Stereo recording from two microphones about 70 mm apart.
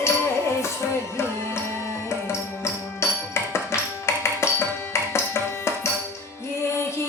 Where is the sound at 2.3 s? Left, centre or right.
Left.